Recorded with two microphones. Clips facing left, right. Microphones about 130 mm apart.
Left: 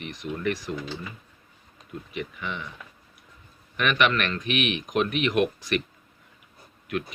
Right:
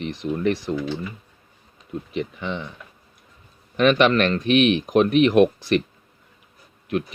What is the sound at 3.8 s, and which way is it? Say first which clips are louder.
Speech: right 7 dB; 30° right (ahead or behind).